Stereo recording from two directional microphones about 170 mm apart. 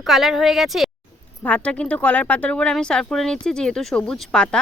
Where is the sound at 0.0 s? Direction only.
Centre (ahead or behind).